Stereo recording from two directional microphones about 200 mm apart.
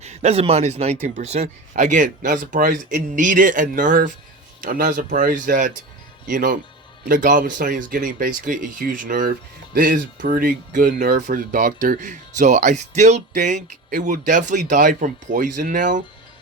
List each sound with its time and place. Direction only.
0.0 s speech: 35° right (ahead or behind)